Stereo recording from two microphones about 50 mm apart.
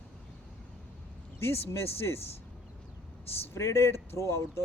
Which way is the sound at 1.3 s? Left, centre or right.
Left.